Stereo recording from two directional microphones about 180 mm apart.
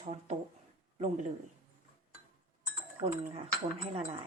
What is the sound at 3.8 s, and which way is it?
Speech, 35° right (ahead or behind).